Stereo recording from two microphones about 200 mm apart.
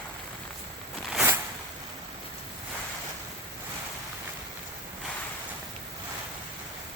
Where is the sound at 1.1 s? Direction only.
5° right (ahead or behind).